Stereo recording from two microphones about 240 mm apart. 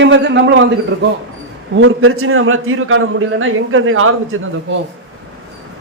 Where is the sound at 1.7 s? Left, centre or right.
Right.